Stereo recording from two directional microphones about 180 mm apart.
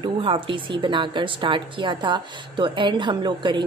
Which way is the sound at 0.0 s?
30° right (ahead or behind).